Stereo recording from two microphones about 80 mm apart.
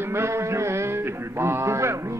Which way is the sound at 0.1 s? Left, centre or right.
Right.